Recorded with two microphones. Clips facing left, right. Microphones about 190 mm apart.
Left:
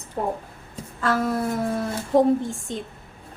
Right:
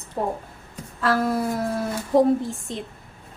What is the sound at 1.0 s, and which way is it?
A woman's voice, centre (ahead or behind).